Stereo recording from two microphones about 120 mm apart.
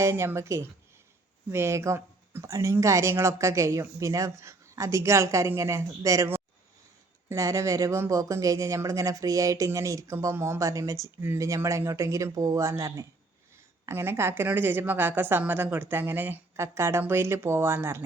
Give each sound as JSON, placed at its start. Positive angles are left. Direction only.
{"t": 0.0, "sound": "speech", "side_deg": -20}